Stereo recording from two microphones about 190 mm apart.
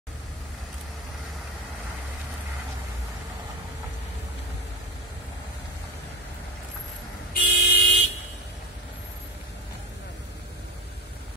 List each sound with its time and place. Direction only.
7.3 s vehicle: 50° left (ahead or behind)